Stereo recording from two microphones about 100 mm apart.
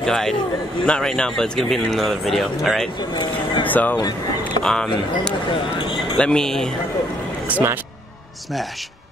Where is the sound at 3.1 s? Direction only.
50° left (ahead or behind).